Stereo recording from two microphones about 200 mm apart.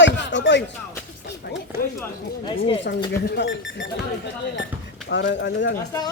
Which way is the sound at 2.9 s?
55° left (ahead or behind).